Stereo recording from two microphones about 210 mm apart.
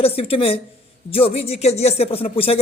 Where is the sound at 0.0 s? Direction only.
25° left (ahead or behind).